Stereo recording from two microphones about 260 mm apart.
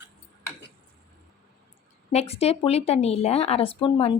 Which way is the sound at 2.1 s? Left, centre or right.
Left.